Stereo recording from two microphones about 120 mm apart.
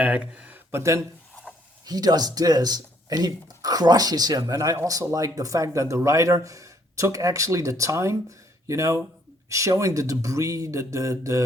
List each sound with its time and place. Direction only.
0.0 s speech: 10° right (ahead or behind); by 11.4 s 25° right (ahead or behind)